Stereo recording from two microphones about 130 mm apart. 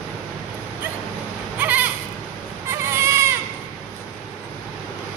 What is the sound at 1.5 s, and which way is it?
Sheep, 10° right (ahead or behind).